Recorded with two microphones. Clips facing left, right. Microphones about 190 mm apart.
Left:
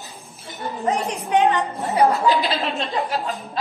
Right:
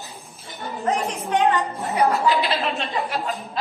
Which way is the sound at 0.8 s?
15° left (ahead or behind).